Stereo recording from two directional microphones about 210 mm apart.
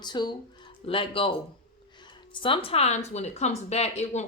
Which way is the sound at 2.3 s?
25° left (ahead or behind).